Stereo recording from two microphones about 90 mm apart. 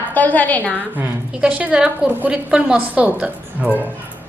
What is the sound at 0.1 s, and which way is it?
Speech, 20° left (ahead or behind).